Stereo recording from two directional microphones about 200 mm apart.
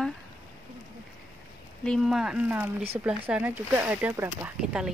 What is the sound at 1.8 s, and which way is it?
Speech, centre (ahead or behind).